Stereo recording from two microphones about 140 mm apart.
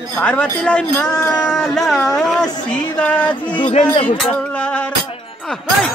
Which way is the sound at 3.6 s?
55° left (ahead or behind).